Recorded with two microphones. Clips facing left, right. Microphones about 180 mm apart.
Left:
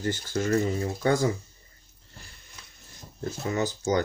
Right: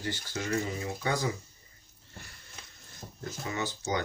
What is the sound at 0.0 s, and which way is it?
Speech, 45° left (ahead or behind).